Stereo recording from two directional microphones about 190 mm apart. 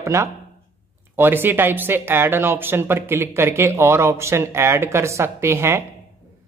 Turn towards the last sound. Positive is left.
turn(degrees=-15)  # may be behind; listen again after turning